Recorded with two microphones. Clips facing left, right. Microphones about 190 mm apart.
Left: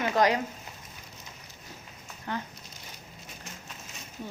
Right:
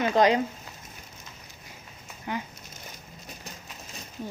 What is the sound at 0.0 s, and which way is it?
Speech, 25° right (ahead or behind).